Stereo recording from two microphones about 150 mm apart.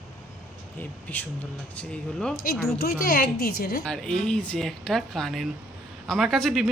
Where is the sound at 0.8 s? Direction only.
10° left (ahead or behind).